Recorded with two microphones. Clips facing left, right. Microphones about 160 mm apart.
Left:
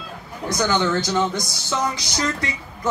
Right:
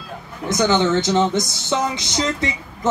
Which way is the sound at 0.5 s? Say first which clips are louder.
Right 4 dB; 20° right (ahead or behind).